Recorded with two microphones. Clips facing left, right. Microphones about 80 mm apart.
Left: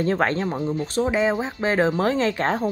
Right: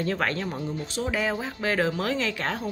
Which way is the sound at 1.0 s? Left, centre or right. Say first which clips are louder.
Left 5 dB; left.